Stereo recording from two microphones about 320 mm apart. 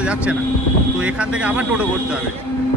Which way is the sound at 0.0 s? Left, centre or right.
Centre.